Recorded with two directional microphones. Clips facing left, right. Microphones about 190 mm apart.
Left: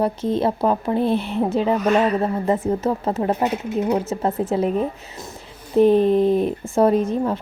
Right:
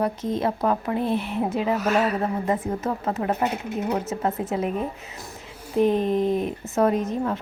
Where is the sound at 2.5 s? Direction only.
30° left (ahead or behind).